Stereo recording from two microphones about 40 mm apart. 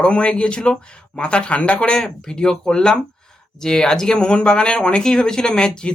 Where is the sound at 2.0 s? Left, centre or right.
Centre.